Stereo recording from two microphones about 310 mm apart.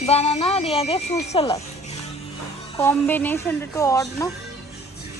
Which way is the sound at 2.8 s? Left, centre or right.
Centre.